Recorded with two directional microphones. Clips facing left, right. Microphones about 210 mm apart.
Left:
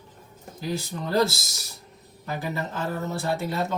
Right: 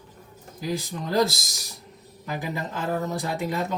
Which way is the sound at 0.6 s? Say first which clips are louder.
Right 1 dB; 15° right (ahead or behind).